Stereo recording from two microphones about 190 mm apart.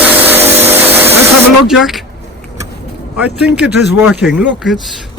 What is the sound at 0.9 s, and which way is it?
Spray, 10° right (ahead or behind).